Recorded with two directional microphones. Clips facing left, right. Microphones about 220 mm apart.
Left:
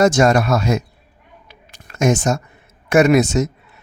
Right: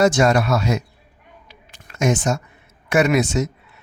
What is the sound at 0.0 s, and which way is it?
Speech, 45° left (ahead or behind).